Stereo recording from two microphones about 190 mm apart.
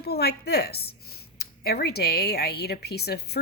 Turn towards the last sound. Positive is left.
turn(degrees=60)  # may be behind; listen again after turning